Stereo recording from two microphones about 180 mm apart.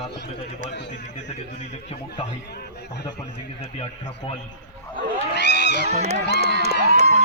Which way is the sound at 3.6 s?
35° left (ahead or behind).